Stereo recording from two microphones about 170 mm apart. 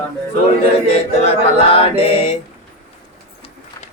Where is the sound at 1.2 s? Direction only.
35° left (ahead or behind).